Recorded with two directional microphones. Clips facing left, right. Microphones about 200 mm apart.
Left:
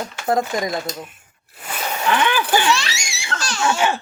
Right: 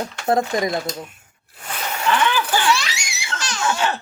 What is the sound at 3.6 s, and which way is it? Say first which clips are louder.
Baby laughter: left 2 dB; 10° left (ahead or behind).